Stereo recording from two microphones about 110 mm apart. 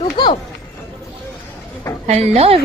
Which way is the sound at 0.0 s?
40° left (ahead or behind).